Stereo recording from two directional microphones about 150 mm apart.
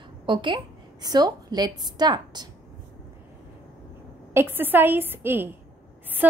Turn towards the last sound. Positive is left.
turn(degrees=-15)  # may be behind; listen again after turning